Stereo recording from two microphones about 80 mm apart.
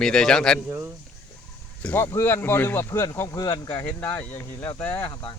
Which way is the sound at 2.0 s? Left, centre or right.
Left.